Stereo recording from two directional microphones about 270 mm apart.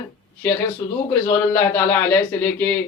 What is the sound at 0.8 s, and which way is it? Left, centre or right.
Speech, centre.